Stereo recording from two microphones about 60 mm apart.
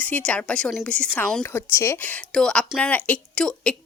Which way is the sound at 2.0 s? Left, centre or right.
Left.